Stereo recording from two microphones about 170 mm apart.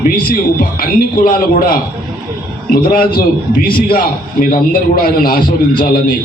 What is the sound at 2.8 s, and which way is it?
A man's voice, 55° left (ahead or behind).